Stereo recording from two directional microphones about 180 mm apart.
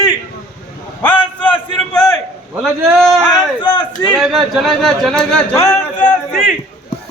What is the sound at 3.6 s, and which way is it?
Speech, 25° left (ahead or behind).